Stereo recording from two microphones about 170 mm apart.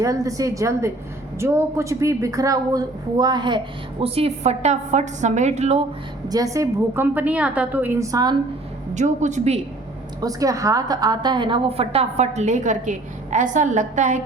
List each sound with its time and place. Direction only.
0.0 s a woman's voice: 20° right (ahead or behind); by 5.8 s 40° right (ahead or behind)
6.2 s a woman's voice: 20° right (ahead or behind)
9.0 s a woman's voice: 45° right (ahead or behind)
10.2 s a woman's voice: 20° right (ahead or behind); by 14.2 s 45° right (ahead or behind)